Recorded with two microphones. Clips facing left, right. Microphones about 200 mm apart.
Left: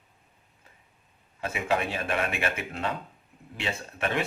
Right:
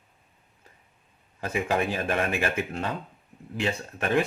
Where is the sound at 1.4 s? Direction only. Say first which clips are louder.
Right 2 dB; 40° right (ahead or behind).